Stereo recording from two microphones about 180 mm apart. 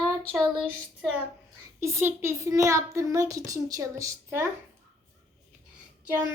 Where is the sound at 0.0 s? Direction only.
5° left (ahead or behind).